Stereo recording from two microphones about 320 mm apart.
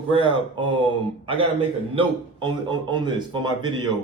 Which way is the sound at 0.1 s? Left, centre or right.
Centre.